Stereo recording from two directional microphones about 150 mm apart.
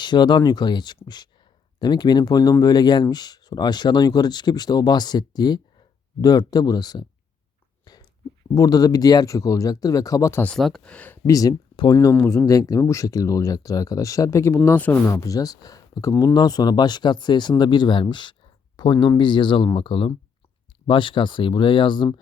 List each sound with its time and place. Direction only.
0.0 s speech: 30° left (ahead or behind)
7.9 s a sound: 25° left (ahead or behind)
8.5 s speech: 25° left (ahead or behind)
10.4 s speech: 5° left (ahead or behind)
11.3 s speech: 25° left (ahead or behind)